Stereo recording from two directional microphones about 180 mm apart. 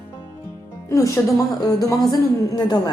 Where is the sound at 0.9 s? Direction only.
15° left (ahead or behind).